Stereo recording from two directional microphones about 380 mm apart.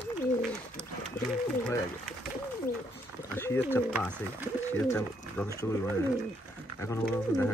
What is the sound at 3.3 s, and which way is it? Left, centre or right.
Speech, centre.